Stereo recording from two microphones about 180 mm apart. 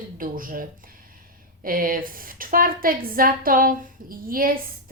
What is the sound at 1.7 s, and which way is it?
Speech, 50° right (ahead or behind).